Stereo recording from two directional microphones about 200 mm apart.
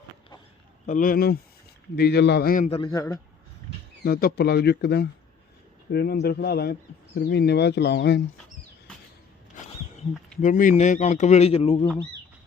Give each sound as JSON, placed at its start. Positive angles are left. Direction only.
{"t": 0.9, "sound": "speech", "side_deg": 40}
{"t": 2.6, "sound": "a man's voice", "side_deg": 25}
{"t": 4.0, "sound": "speech", "side_deg": 50}
{"t": 10.4, "sound": "a man's voice", "side_deg": 40}